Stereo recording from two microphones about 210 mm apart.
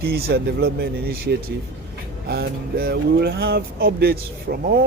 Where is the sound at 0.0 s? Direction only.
50° right (ahead or behind).